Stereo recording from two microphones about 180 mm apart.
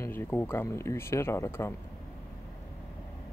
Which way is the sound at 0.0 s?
10° left (ahead or behind).